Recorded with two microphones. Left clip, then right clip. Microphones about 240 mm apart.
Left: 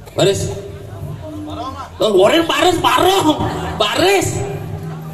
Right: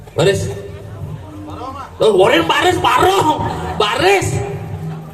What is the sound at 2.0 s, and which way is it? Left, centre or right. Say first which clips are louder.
A man's voice: right 1 dB; left.